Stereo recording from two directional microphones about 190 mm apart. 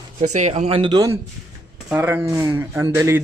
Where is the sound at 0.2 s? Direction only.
35° right (ahead or behind).